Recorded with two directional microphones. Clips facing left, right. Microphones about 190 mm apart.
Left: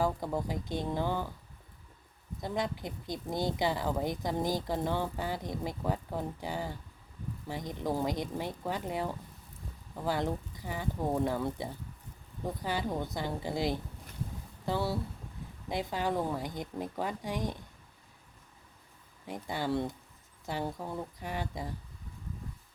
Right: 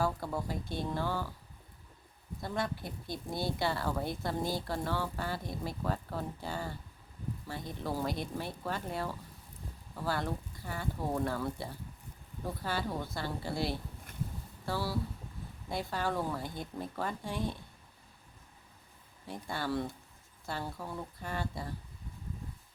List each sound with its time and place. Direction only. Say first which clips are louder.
0.0 s speech: left 2 dB; 20° left (ahead or behind)
2.4 s speech: left 2 dB; 15° left (ahead or behind)
19.3 s speech: left 3 dB; 15° left (ahead or behind)